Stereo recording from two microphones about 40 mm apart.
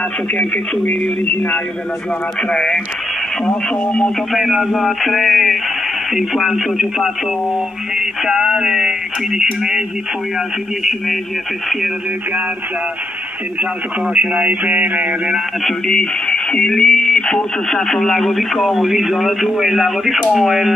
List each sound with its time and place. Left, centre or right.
1.3 s speech: left
2.5 s speech: centre
4.3 s speech: centre
4.7 s speech: centre
8.3 s speech: centre
14.1 s mantra: right
15.9 s speech: left; by 20.7 s centre